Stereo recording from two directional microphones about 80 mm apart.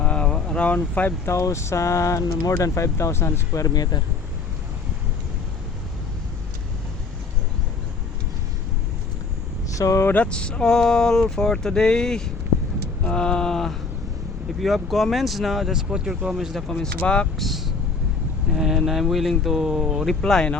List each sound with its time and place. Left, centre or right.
0.0 s vehicle: centre
1.2 s speech: left
3.6 s speech: left
9.7 s speech: left
10.2 s speech: centre
13.1 s a sound: centre
14.6 s speech: centre
17.3 s speech: centre